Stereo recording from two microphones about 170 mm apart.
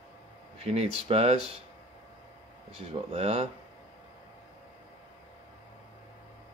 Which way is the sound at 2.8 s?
40° right (ahead or behind).